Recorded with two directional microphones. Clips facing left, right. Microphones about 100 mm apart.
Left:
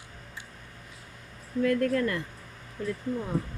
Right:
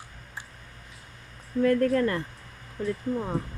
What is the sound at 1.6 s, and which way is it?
Speech, 35° right (ahead or behind).